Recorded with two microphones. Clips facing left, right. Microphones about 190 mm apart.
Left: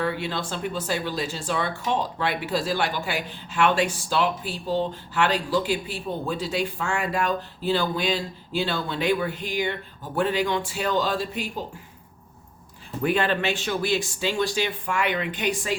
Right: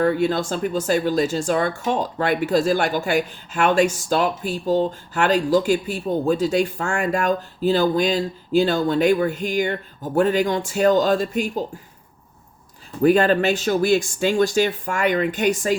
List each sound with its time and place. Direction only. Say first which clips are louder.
0.0 s speech: right 8 dB; 45° right (ahead or behind)
13.0 s speech: right 8 dB; 40° right (ahead or behind)